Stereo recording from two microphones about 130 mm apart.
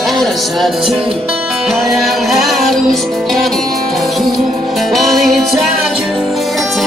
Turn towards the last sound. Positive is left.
turn(degrees=0)  # may be behind; listen again after turning